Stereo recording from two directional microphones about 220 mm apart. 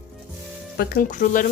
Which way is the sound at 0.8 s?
40° left (ahead or behind).